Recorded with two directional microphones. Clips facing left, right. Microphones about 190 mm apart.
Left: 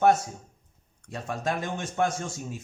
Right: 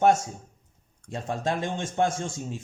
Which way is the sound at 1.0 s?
25° right (ahead or behind).